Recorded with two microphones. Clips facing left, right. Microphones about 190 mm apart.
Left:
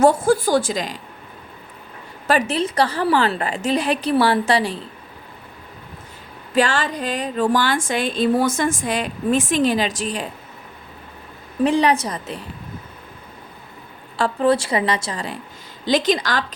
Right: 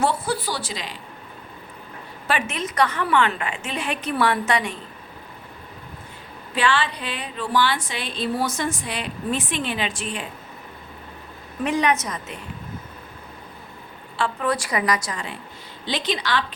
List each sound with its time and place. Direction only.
0.0 s a woman's voice: 45° left (ahead or behind)
2.2 s a woman's voice: 35° left (ahead or behind)
6.5 s a woman's voice: 45° left (ahead or behind)
11.6 s a woman's voice: 30° left (ahead or behind)
14.2 s a woman's voice: 35° left (ahead or behind)